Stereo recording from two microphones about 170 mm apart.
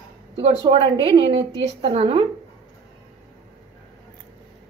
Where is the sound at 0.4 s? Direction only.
30° right (ahead or behind).